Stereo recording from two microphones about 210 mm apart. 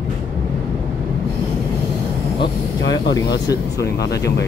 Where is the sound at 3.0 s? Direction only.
20° left (ahead or behind).